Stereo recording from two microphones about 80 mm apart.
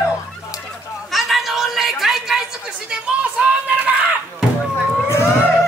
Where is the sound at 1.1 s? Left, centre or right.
Centre.